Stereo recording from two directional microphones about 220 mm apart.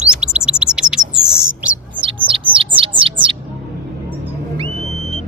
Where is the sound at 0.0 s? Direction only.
5° right (ahead or behind).